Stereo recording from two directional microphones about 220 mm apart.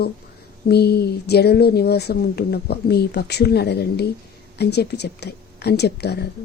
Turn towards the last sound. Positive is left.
turn(degrees=50)  # may be behind; listen again after turning